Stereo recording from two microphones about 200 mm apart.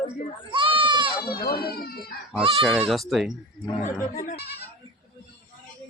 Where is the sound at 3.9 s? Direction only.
40° left (ahead or behind).